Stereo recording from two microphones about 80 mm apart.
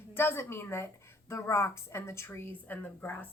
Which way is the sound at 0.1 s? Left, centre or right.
Left.